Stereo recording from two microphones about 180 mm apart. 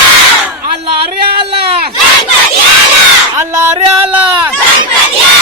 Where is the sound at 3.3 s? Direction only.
15° right (ahead or behind).